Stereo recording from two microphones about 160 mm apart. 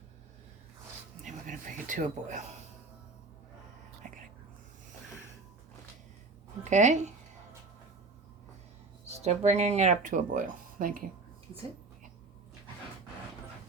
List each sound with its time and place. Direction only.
1.2 s a sound: 55° right (ahead or behind)
6.7 s speech: 50° right (ahead or behind)
9.0 s speech: 40° right (ahead or behind); by 11.0 s 60° right (ahead or behind)